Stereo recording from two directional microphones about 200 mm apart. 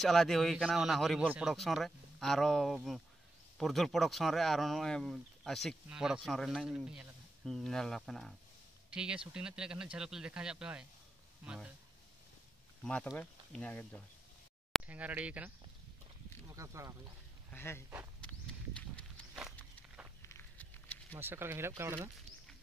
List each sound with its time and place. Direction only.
0.0 s speech: centre (ahead or behind)
12.8 s speech: 5° left (ahead or behind)
14.7 s speech: 5° right (ahead or behind)
17.5 s speech: 10° left (ahead or behind)
18.2 s walk: 5° left (ahead or behind)
20.2 s a sound: 15° left (ahead or behind)
21.1 s speech: 10° right (ahead or behind)